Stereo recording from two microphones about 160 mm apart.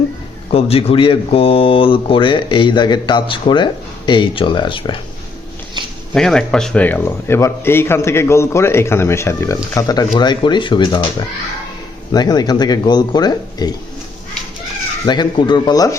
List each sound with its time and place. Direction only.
0.5 s speech: 35° left (ahead or behind)
6.1 s a man's voice: 5° left (ahead or behind); by 11.1 s 30° left (ahead or behind)
12.1 s speech: 25° left (ahead or behind)
15.0 s speech: 25° left (ahead or behind)